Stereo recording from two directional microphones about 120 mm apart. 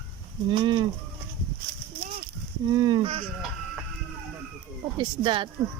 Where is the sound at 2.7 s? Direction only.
40° right (ahead or behind).